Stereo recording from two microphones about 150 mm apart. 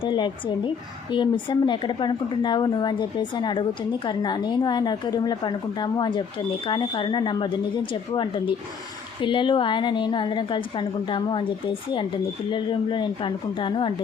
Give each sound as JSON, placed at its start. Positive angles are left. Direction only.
{"t": 0.0, "sound": "a woman's voice", "side_deg": 30}